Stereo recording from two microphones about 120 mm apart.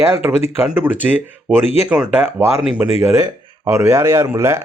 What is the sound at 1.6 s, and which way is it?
Speech, 65° left (ahead or behind).